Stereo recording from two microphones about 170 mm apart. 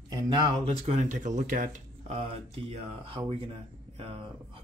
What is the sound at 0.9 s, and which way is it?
Speech, 45° right (ahead or behind).